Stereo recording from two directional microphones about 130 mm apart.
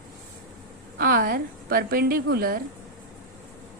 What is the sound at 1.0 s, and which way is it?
Speech, 90° right.